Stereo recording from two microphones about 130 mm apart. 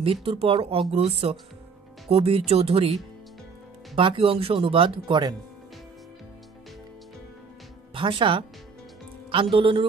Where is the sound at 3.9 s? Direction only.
45° right (ahead or behind).